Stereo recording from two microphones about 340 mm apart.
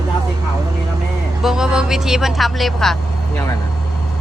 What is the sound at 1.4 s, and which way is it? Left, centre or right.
Speech, centre.